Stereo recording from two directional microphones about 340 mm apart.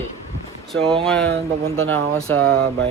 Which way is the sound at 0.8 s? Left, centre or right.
Centre.